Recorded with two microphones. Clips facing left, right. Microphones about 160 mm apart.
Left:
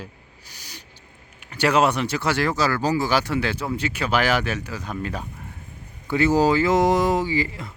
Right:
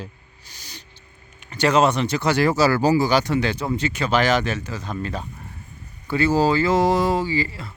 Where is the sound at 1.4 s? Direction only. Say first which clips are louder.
Right 1 dB; 10° left (ahead or behind); by 3.0 s 10° right (ahead or behind).